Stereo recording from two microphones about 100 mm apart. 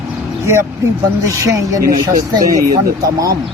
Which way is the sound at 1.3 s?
30° right (ahead or behind).